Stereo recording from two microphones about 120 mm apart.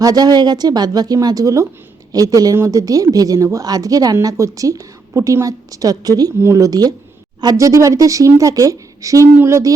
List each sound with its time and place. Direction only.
0.0 s a woman's voice: 35° right (ahead or behind)